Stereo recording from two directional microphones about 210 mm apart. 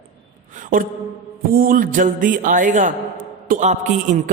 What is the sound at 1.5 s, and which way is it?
A man's voice, 40° right (ahead or behind).